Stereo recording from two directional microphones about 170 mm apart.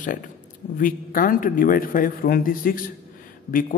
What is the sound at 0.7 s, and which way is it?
A man's voice, 55° left (ahead or behind).